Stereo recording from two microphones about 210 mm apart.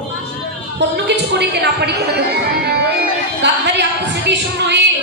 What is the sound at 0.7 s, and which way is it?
A woman's voice, 55° right (ahead or behind).